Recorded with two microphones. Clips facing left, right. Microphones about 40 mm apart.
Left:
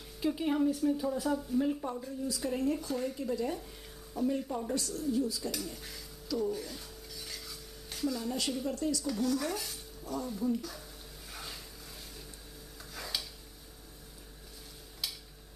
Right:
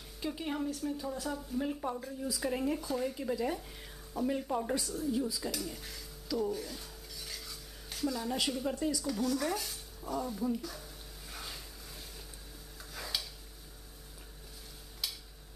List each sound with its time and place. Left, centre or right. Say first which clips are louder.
0.2 s speech: left 6 dB; centre
4.7 s speech: left 1 dB; centre
6.5 s cutlery: even; centre
8.6 s speech: even; centre
9.0 s speech: left 1 dB; centre
11.3 s a sound: even; centre
12.9 s a sound: even; centre